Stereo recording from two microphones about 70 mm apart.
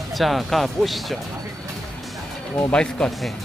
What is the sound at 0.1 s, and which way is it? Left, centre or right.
Speech, centre.